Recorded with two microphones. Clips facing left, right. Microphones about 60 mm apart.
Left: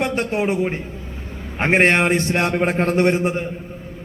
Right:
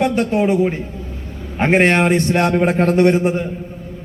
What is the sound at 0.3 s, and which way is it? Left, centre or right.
A man's voice, centre.